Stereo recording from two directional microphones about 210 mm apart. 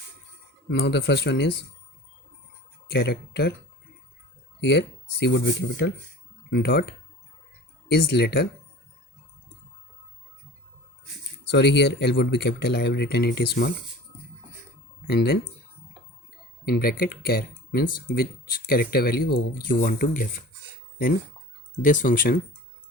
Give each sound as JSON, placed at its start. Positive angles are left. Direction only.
{"t": 0.7, "sound": "speech", "side_deg": 55}
{"t": 2.8, "sound": "speech", "side_deg": 50}
{"t": 4.6, "sound": "speech", "side_deg": 55}
{"t": 7.9, "sound": "speech", "side_deg": 50}
{"t": 11.4, "sound": "speech", "side_deg": 55}
{"t": 15.0, "sound": "speech", "side_deg": 50}
{"t": 16.6, "sound": "speech", "side_deg": 45}
{"t": 21.8, "sound": "speech", "side_deg": 40}